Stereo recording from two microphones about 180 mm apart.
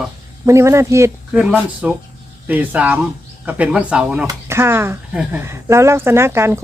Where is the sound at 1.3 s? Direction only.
5° right (ahead or behind).